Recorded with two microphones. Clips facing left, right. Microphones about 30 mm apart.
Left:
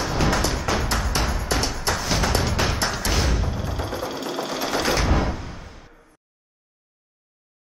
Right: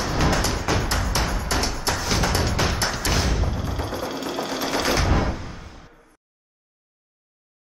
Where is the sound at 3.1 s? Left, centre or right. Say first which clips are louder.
Even; centre.